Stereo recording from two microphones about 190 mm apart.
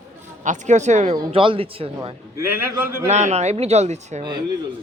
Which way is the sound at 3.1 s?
35° right (ahead or behind).